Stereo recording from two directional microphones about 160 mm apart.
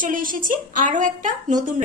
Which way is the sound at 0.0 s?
60° right (ahead or behind).